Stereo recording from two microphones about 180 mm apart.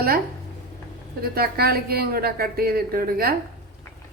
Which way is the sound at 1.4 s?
60° right (ahead or behind).